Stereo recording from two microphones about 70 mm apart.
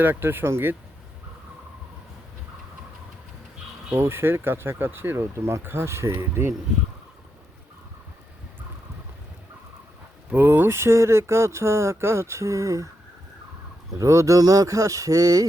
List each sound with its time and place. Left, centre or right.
0.0 s speech: right
3.9 s speech: right
10.2 s speech: right
14.0 s speech: right